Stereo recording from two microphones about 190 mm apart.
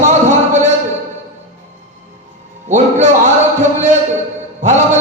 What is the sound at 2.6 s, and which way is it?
Music, 40° right (ahead or behind).